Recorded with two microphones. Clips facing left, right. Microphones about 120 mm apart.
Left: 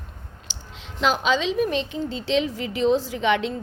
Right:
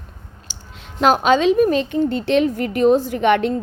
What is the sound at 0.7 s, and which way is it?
A woman's voice, 50° right (ahead or behind).